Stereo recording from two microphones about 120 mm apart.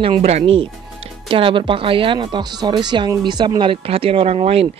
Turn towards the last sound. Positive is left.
turn(degrees=-55)  # may be behind; listen again after turning